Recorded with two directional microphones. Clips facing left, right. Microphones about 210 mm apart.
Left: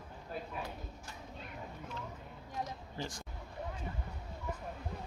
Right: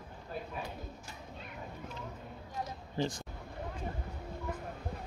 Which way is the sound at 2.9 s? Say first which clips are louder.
Right 9 dB; 25° right (ahead or behind).